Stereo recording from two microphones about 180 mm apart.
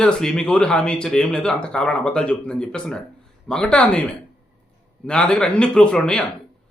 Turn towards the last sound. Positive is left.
turn(degrees=5)  # may be behind; listen again after turning